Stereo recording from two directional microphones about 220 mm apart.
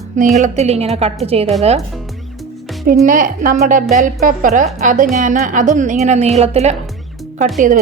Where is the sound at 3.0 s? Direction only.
40° right (ahead or behind).